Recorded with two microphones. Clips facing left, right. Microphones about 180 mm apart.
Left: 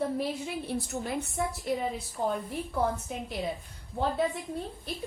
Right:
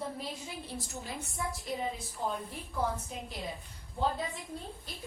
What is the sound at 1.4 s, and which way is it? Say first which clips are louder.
Speech: left 5 dB; 70° left (ahead or behind).